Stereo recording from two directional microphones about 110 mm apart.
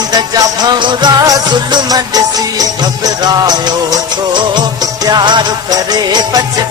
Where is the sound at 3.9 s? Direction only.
45° right (ahead or behind).